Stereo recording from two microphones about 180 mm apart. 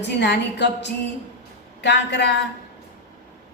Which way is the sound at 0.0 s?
70° left (ahead or behind).